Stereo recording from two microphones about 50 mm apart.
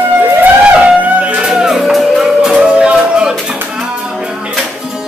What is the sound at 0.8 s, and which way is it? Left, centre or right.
Music, right.